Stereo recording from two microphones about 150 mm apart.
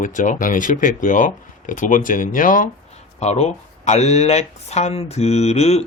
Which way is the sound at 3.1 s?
45° left (ahead or behind).